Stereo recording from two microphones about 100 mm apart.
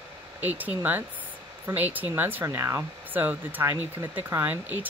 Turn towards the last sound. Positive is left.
turn(degrees=-20)  # may be behind; listen again after turning